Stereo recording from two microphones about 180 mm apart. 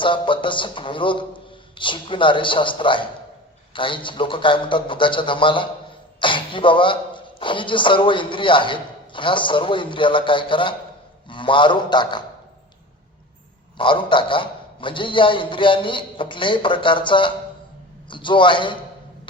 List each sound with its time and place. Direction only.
0.0 s speech: 25° left (ahead or behind)
13.7 s speech: 25° left (ahead or behind)